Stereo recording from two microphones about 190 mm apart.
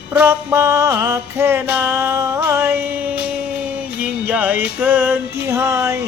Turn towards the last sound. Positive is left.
turn(degrees=-15)  # may be behind; listen again after turning